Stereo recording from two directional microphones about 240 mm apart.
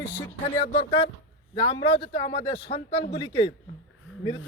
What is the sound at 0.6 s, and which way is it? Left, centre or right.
A man's voice, left.